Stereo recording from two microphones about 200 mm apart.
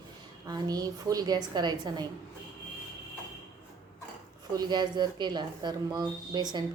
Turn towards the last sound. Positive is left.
turn(degrees=-20)  # may be behind; listen again after turning